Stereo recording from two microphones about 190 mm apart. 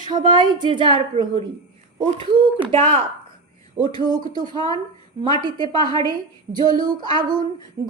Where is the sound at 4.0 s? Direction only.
20° right (ahead or behind).